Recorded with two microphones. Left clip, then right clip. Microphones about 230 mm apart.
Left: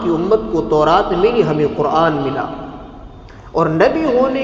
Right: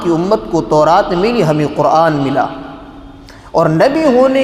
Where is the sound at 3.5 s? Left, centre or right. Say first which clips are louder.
Right 3 dB; right.